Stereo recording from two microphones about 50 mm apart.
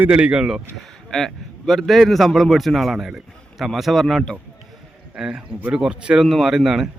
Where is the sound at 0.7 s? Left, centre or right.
Centre.